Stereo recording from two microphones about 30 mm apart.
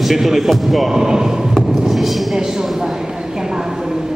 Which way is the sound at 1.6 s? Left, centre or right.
Centre.